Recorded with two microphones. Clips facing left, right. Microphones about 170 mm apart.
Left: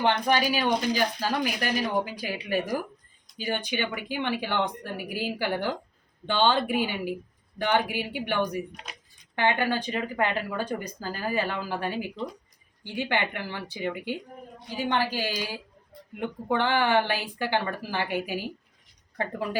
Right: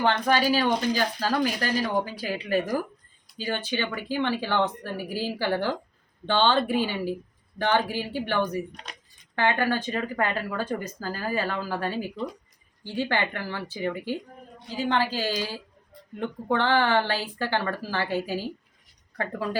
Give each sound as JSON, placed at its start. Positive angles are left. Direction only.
{"t": 0.0, "sound": "speech", "side_deg": 15}